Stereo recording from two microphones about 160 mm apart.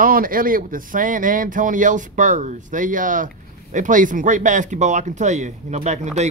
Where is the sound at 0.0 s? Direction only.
60° right (ahead or behind).